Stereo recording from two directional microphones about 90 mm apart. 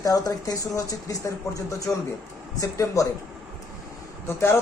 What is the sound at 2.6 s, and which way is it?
Speech, 40° left (ahead or behind).